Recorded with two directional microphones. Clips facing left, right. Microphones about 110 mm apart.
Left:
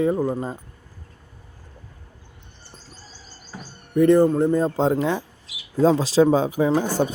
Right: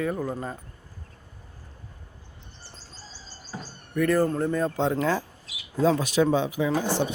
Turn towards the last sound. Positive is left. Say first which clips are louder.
# left 4 dB
turn(degrees=45)  # may be behind; listen again after turning